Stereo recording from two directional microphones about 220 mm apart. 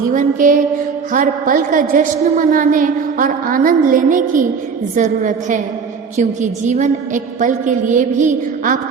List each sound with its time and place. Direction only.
0.1 s a woman's voice: 35° right (ahead or behind)